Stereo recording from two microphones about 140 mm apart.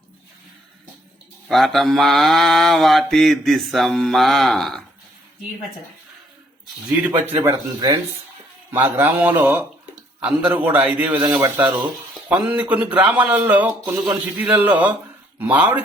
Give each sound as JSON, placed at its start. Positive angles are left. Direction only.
{"t": 1.5, "sound": "mantra", "side_deg": 0}
{"t": 7.4, "sound": "speech", "side_deg": -30}
{"t": 8.7, "sound": "a man's voice", "side_deg": -15}
{"t": 14.0, "sound": "a man's voice", "side_deg": -10}